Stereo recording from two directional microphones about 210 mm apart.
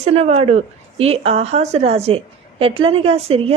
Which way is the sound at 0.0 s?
30° right (ahead or behind).